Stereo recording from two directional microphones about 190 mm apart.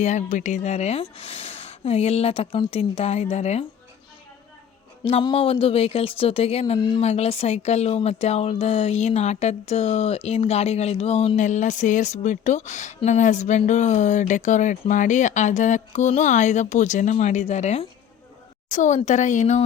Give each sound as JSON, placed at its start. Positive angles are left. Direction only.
{"t": 0.0, "sound": "speech", "side_deg": 40}
{"t": 5.0, "sound": "speech", "side_deg": 30}